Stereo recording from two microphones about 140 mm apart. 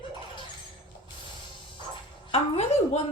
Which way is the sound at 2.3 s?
45° left (ahead or behind).